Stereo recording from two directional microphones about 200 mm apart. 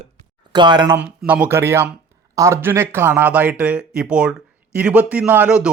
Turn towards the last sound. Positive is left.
turn(degrees=-5)  # may be behind; listen again after turning